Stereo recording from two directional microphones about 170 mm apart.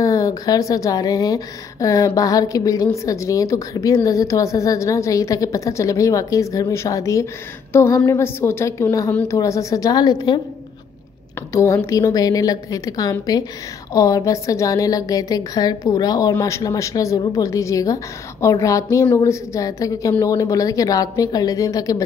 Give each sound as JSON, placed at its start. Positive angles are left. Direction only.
{"t": 0.0, "sound": "a woman's voice", "side_deg": 20}
{"t": 11.5, "sound": "a woman's voice", "side_deg": 15}